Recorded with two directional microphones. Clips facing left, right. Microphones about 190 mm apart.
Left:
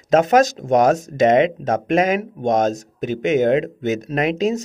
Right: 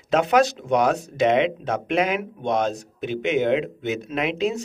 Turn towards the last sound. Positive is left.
turn(degrees=40)  # may be behind; listen again after turning